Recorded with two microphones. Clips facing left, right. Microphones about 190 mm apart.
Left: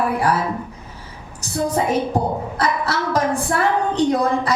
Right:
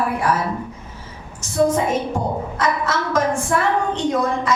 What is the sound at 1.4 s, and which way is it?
A woman's voice, 35° left (ahead or behind).